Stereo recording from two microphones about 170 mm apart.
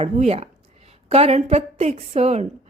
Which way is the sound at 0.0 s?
40° right (ahead or behind).